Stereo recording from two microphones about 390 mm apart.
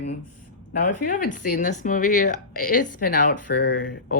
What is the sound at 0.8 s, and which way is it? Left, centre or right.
Speech, left.